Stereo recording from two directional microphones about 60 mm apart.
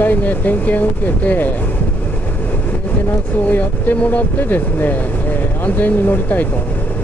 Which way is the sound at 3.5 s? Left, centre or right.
Left.